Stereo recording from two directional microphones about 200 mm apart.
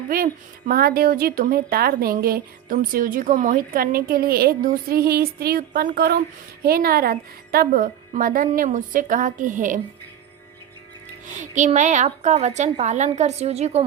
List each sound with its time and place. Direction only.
0.1 s a woman's voice: 45° right (ahead or behind)
11.3 s a woman's voice: 35° right (ahead or behind)